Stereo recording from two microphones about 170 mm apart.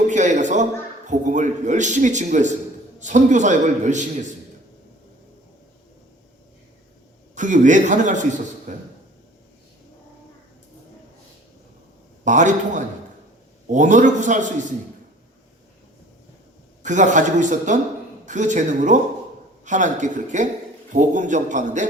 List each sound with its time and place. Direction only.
0.1 s a sound: 45° right (ahead or behind)
3.0 s a man's voice: 45° right (ahead or behind)
7.3 s a man's voice: 45° right (ahead or behind)
12.2 s a man's voice: 45° right (ahead or behind)
16.8 s a man's voice: 45° right (ahead or behind)